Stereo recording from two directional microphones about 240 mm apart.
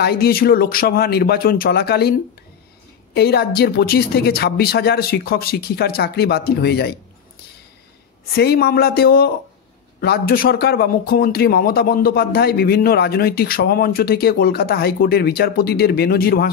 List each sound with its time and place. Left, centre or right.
0.0 s speech: left
3.2 s speech: left
8.4 s speech: left